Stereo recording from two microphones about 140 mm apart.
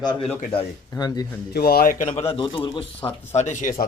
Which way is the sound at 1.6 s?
90° left.